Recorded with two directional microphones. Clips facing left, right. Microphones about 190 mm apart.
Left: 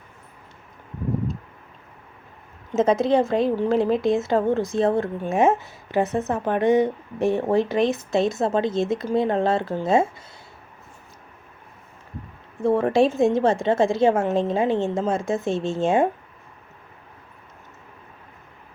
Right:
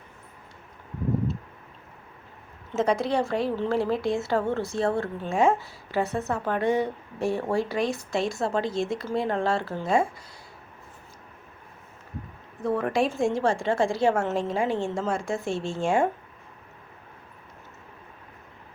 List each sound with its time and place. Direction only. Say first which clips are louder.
2.7 s a woman's voice: left 6 dB; 20° left (ahead or behind)
12.6 s a woman's voice: left 6 dB; 25° left (ahead or behind)